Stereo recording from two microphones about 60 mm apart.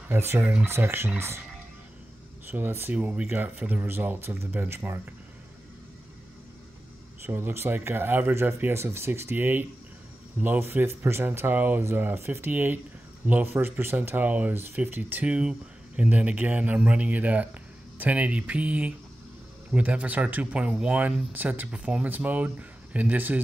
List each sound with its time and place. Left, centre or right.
0.1 s speech: right
2.4 s speech: right
2.9 s speech: right
7.2 s speech: right
21.6 s speech: centre